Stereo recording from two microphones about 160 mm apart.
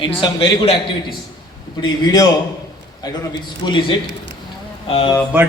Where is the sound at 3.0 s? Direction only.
25° left (ahead or behind).